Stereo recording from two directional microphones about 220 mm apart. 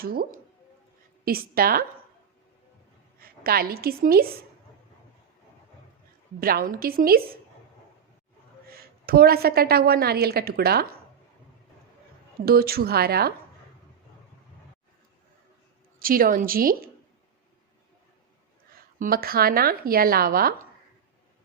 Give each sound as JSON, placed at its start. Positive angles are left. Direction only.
{"t": 0.0, "sound": "a woman's voice", "side_deg": -45}
{"t": 3.2, "sound": "a woman's voice", "side_deg": -40}
{"t": 6.4, "sound": "speech", "side_deg": -40}
{"t": 8.7, "sound": "a woman's voice", "side_deg": -45}
{"t": 12.5, "sound": "a woman's voice", "side_deg": -45}
{"t": 16.0, "sound": "speech", "side_deg": -40}
{"t": 18.7, "sound": "a woman's voice", "side_deg": -40}